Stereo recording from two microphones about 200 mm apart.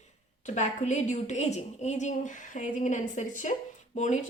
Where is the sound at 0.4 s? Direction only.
35° left (ahead or behind).